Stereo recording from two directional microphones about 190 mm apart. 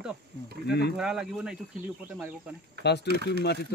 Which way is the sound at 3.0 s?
60° right (ahead or behind).